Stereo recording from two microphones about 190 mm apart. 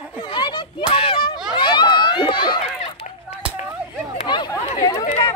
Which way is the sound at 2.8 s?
40° left (ahead or behind).